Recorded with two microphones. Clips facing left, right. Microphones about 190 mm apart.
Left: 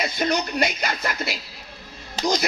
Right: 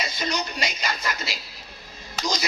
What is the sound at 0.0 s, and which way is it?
Speech, 55° left (ahead or behind).